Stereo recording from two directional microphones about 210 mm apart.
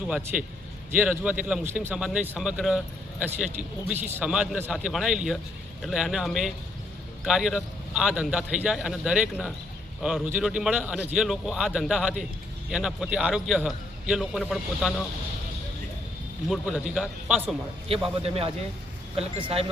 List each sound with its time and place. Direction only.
0.1 s a man's voice: 5° right (ahead or behind)
16.5 s a man's voice: centre (ahead or behind)
18.2 s speech: 30° right (ahead or behind)